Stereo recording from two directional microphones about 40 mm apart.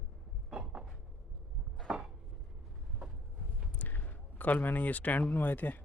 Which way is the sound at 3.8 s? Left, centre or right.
Left.